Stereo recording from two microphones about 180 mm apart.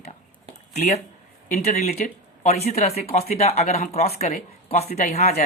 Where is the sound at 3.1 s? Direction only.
35° left (ahead or behind).